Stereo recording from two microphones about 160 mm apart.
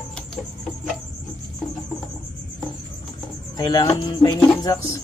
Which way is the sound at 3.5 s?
30° left (ahead or behind).